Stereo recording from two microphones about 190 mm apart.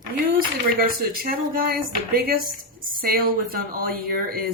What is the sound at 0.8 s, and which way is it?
Speech, 50° right (ahead or behind).